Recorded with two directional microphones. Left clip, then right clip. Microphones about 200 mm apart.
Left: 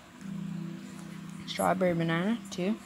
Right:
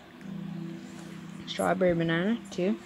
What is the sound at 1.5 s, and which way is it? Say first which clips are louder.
Speech: right 2 dB; 15° left (ahead or behind).